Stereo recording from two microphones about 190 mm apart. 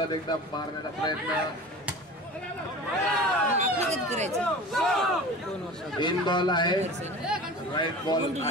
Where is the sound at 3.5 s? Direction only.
35° right (ahead or behind).